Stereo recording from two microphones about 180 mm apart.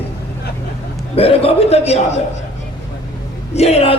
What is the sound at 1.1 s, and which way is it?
Speech, 30° left (ahead or behind).